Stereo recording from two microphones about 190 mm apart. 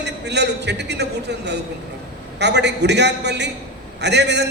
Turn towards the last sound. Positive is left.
turn(degrees=-65)  # may be behind; listen again after turning